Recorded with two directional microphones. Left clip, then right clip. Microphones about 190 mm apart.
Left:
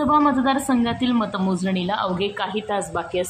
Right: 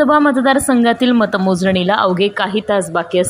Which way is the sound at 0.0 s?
30° right (ahead or behind).